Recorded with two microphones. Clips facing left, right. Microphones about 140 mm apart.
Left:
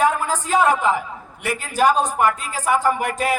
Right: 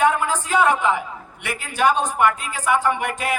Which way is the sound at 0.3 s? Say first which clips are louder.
Left 1 dB; 40° left (ahead or behind).